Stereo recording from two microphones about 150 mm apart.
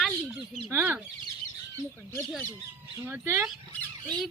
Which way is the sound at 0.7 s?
15° right (ahead or behind).